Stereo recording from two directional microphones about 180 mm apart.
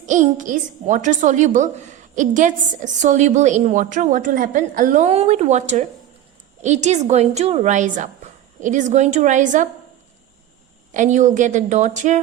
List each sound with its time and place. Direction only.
0.0 s a woman's voice: 45° right (ahead or behind)
10.9 s a woman's voice: 45° right (ahead or behind)